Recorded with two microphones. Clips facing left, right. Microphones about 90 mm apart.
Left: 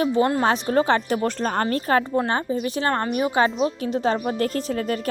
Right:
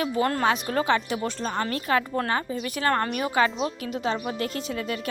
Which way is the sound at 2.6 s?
25° left (ahead or behind).